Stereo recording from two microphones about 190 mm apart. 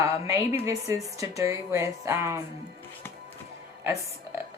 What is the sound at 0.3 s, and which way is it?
Speech, 15° right (ahead or behind).